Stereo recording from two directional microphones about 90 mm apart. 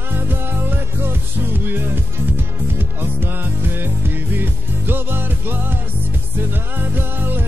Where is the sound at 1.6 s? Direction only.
25° right (ahead or behind).